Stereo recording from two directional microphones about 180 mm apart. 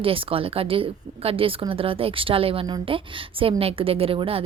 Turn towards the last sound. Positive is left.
turn(degrees=-30)  # may be behind; listen again after turning